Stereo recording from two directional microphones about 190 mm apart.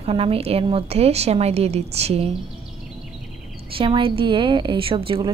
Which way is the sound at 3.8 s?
25° right (ahead or behind).